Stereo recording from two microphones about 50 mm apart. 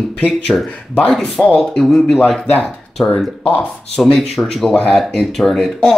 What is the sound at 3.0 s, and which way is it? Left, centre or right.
Speech, left.